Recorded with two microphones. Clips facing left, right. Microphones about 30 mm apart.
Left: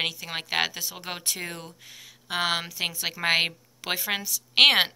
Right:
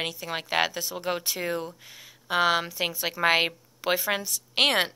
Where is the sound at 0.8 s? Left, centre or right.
Centre.